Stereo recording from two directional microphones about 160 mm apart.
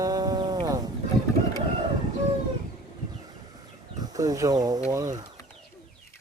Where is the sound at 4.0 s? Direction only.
25° right (ahead or behind).